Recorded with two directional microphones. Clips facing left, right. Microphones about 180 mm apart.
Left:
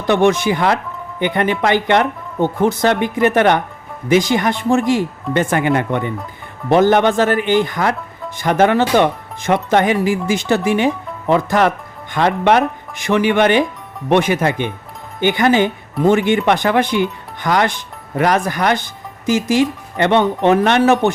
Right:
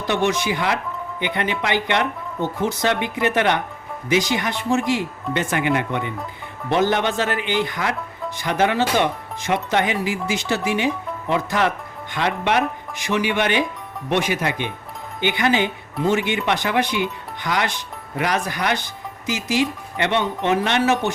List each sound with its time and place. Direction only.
0.1 s speech: 55° left (ahead or behind)